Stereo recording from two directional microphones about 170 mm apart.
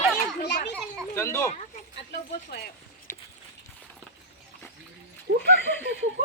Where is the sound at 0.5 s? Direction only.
85° left.